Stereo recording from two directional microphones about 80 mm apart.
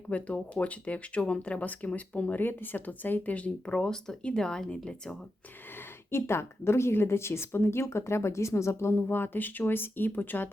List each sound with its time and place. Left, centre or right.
0.1 s speech: centre
6.1 s a woman's voice: left